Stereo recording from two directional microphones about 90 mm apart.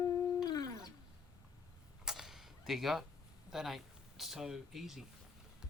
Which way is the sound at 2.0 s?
5° right (ahead or behind).